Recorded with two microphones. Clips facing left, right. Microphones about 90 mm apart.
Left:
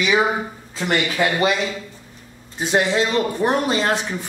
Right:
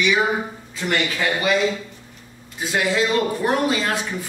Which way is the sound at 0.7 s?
25° left (ahead or behind).